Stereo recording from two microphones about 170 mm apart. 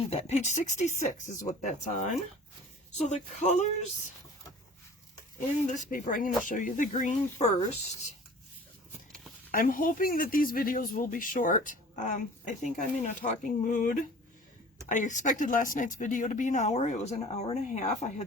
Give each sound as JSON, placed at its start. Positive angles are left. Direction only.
{"t": 0.1, "sound": "speech", "side_deg": 40}
{"t": 5.6, "sound": "speech", "side_deg": 45}
{"t": 9.5, "sound": "speech", "side_deg": 55}